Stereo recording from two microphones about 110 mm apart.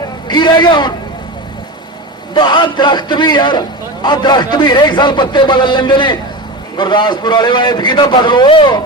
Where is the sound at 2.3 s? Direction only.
40° left (ahead or behind).